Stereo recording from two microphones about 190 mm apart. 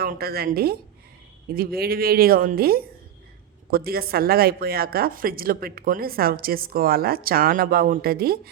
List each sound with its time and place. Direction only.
0.0 s speech: 55° right (ahead or behind)